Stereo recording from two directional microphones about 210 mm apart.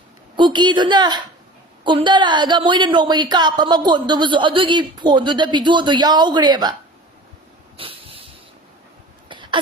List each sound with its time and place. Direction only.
0.3 s a woman's voice: 20° right (ahead or behind)
7.8 s a sound: 25° right (ahead or behind)
9.3 s throat clearing: 20° right (ahead or behind)